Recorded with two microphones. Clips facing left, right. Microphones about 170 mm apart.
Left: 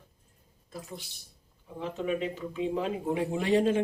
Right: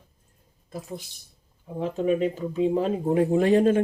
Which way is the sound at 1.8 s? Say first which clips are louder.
Right 7 dB; 45° right (ahead or behind).